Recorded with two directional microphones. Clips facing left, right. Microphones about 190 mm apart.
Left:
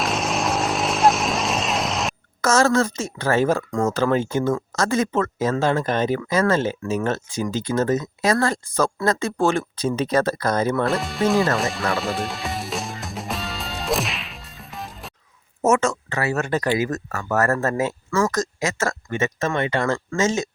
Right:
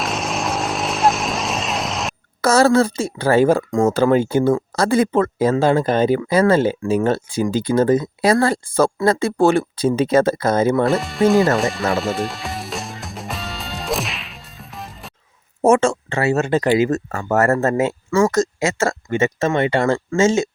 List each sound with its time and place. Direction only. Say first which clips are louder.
0.0 s vehicle: even; centre (ahead or behind)
2.4 s speech: right 4 dB; 35° right (ahead or behind)
10.8 s speech: right 5 dB; centre (ahead or behind)
11.5 s music: right 4 dB; centre (ahead or behind)
15.6 s speech: right 5 dB; 30° right (ahead or behind)